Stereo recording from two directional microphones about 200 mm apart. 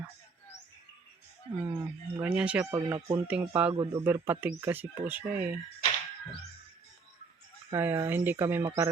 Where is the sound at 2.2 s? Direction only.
5° right (ahead or behind).